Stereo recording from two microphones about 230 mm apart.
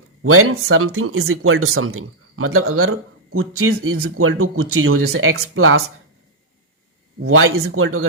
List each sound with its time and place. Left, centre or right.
0.2 s speech: right
7.2 s speech: right